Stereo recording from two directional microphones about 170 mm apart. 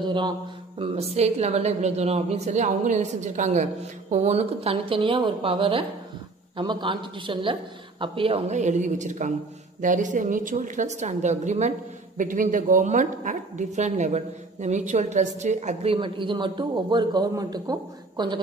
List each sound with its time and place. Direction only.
0.0 s a man's voice: 25° right (ahead or behind)